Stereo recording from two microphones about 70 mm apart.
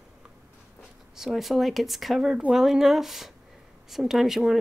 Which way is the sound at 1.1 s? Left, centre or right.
Centre.